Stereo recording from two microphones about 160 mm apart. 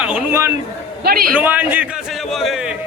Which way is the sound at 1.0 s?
70° right (ahead or behind).